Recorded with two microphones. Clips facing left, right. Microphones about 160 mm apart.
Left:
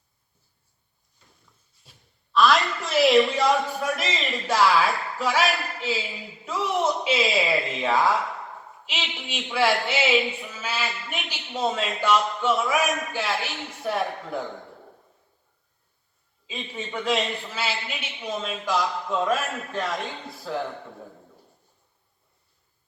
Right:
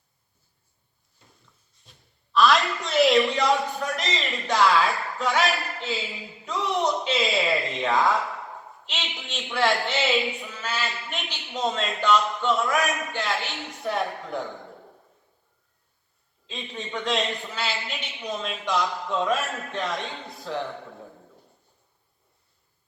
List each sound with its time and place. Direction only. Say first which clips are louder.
1.8 s a man's voice: even; centre (ahead or behind)
16.5 s a man's voice: left 1 dB; 5° left (ahead or behind)